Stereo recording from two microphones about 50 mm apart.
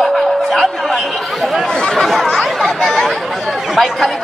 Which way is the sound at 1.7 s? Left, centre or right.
Centre.